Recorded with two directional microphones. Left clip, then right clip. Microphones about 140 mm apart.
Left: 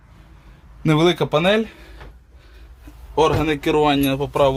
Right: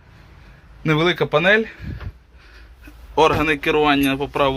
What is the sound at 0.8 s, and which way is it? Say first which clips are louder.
Speech: left 1 dB; 45° left (ahead or behind).